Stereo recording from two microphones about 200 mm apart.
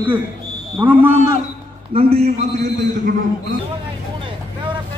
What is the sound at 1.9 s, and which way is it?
Speech, 30° right (ahead or behind).